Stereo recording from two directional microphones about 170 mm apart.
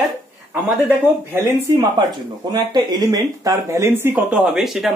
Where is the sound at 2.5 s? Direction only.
25° right (ahead or behind).